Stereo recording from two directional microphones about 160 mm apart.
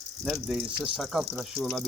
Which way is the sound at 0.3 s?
5° right (ahead or behind).